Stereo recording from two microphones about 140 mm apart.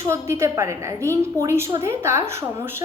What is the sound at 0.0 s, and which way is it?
A woman's voice, 20° right (ahead or behind).